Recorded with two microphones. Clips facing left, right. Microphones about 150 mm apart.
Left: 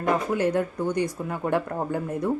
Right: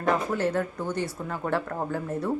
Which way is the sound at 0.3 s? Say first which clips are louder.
Left 3 dB; 15° left (ahead or behind).